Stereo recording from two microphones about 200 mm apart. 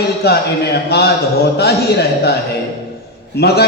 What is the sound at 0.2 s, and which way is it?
A man's voice, 55° left (ahead or behind).